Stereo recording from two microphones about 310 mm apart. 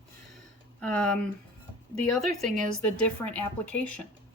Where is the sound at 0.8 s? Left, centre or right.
Centre.